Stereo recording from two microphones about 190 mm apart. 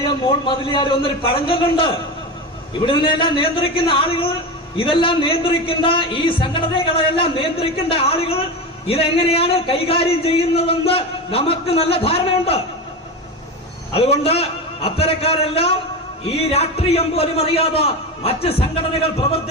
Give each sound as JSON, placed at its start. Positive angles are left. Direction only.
{"t": 0.4, "sound": "speech", "side_deg": 25}
{"t": 2.8, "sound": "speech", "side_deg": 25}
{"t": 13.9, "sound": "speech", "side_deg": 30}